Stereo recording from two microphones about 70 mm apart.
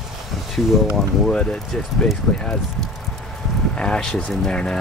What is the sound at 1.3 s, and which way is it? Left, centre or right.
Speech, centre.